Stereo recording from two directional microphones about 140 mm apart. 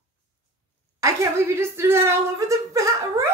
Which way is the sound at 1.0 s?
20° right (ahead or behind).